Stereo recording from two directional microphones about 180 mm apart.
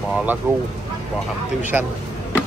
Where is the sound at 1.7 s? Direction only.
10° right (ahead or behind).